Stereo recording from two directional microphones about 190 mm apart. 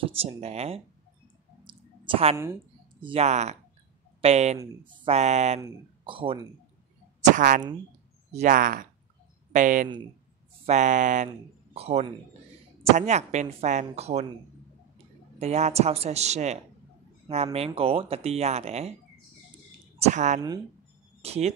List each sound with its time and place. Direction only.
0.0 s speech: 30° right (ahead or behind)
1.6 s clicking: 25° right (ahead or behind)
3.0 s speech: 30° right (ahead or behind)
7.3 s a man's voice: 45° right (ahead or behind)
15.3 s speech: 35° right (ahead or behind)
20.0 s speech: 40° right (ahead or behind)